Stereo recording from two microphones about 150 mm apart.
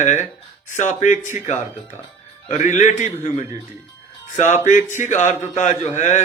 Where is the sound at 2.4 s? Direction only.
55° left (ahead or behind).